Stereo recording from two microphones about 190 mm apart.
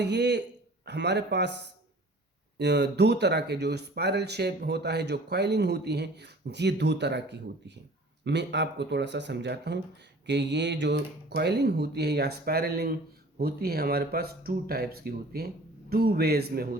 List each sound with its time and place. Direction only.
0.0 s speech: 65° right (ahead or behind)
2.6 s speech: 65° right (ahead or behind)